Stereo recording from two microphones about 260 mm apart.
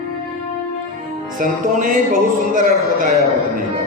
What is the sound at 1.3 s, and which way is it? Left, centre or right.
Music, right.